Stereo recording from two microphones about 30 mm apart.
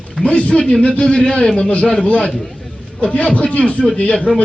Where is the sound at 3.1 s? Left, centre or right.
Left.